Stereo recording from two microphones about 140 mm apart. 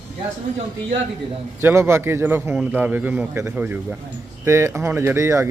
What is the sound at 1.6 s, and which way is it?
A man's voice, 20° right (ahead or behind).